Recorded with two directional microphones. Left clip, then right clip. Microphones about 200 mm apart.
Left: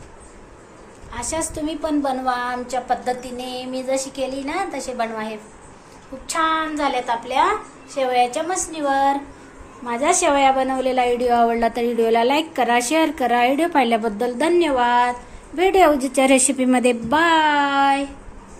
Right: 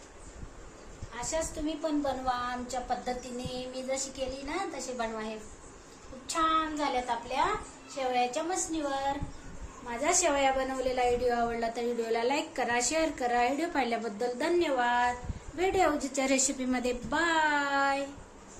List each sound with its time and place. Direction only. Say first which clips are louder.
1.1 s a woman's voice: left 8 dB; 30° left (ahead or behind)
6.2 s a woman's voice: left 8 dB; 30° left (ahead or behind)